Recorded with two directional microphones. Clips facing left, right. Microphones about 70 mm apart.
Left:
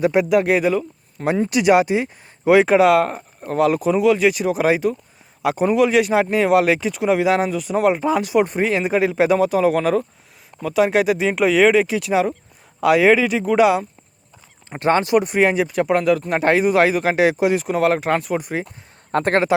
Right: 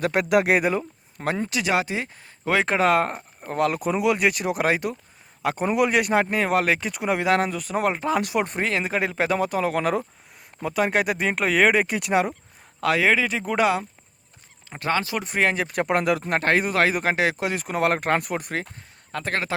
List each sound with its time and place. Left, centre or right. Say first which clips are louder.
0.0 s speech: left 4 dB; centre
1.2 s speech: left 6 dB; centre
1.5 s speech: left 12 dB; left
5.6 s speech: left 5 dB; centre
12.8 s speech: left 7 dB; centre
13.4 s speech: left 7 dB; centre
14.7 s speech: left 7 dB; left
15.1 s speech: left 7 dB; centre
15.6 s speech: left 5 dB; centre
16.5 s speech: left 5 dB; centre
16.9 s speech: left 6 dB; centre
19.1 s speech: left 10 dB; left